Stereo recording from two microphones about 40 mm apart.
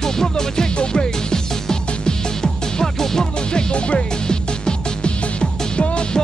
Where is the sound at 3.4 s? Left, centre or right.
Left.